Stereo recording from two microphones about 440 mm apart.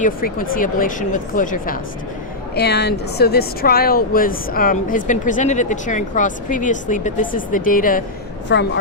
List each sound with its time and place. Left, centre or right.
0.0 s speech: centre